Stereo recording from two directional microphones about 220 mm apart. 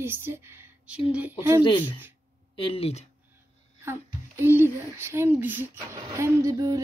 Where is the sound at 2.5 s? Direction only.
25° left (ahead or behind).